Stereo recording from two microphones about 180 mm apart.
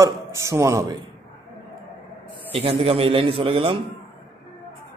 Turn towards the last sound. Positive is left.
turn(degrees=-30)  # may be behind; listen again after turning